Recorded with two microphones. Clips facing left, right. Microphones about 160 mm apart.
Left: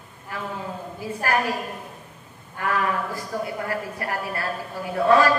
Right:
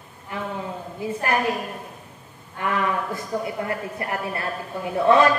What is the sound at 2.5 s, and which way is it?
A woman's voice, 20° right (ahead or behind).